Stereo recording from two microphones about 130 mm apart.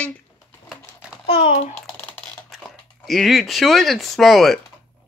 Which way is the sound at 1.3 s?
45° left (ahead or behind).